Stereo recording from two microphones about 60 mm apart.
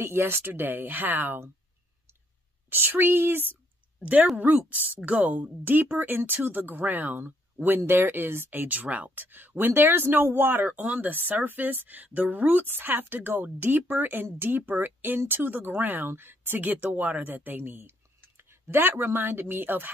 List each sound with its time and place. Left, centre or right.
0.0 s speech: right
2.7 s speech: right